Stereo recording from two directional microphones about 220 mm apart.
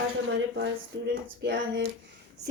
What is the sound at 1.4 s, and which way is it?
Speech, 50° right (ahead or behind).